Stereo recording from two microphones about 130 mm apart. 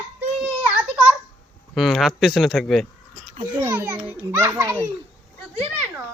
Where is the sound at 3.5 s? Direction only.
20° right (ahead or behind).